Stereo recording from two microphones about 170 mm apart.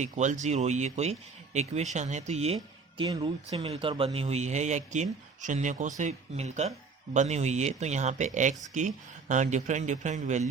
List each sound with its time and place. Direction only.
0.0 s a man's voice: 45° right (ahead or behind)
3.0 s a man's voice: 25° right (ahead or behind); by 10.5 s 45° right (ahead or behind)